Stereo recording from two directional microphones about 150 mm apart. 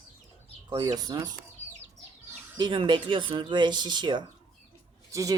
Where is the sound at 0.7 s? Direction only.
25° right (ahead or behind).